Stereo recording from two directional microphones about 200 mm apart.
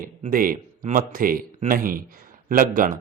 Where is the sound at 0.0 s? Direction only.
45° right (ahead or behind).